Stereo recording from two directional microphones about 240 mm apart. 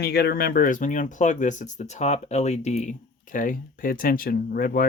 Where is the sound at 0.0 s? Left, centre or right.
Left.